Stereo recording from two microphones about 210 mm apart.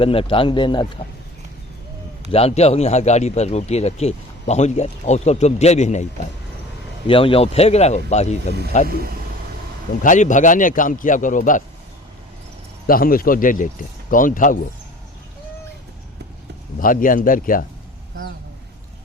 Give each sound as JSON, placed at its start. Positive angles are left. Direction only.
{"t": 0.0, "sound": "speech", "side_deg": 25}
{"t": 2.3, "sound": "speech", "side_deg": 30}
{"t": 7.1, "sound": "speech", "side_deg": 25}
{"t": 8.9, "sound": "speech", "side_deg": -45}
{"t": 10.0, "sound": "speech", "side_deg": 35}
{"t": 12.9, "sound": "speech", "side_deg": 45}
{"t": 16.8, "sound": "speech", "side_deg": 40}